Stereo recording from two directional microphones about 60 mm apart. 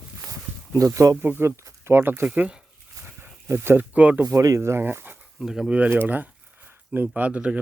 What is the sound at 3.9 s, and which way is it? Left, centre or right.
Speech, right.